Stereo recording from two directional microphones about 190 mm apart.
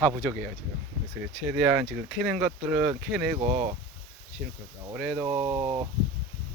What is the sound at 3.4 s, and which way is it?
Speech, 35° right (ahead or behind).